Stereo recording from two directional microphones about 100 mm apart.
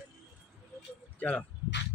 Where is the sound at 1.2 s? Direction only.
15° left (ahead or behind).